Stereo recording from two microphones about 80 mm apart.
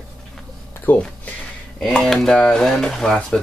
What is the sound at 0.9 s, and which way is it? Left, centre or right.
Speech, left.